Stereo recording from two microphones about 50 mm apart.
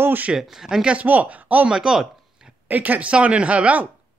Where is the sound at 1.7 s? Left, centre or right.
Centre.